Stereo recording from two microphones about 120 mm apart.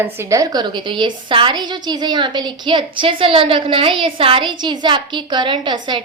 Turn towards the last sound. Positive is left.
turn(degrees=-40)  # may be behind; listen again after turning